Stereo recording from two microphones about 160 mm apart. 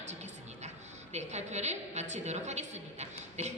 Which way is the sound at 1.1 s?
45° right (ahead or behind).